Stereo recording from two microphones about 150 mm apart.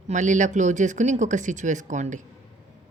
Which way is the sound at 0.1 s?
55° right (ahead or behind).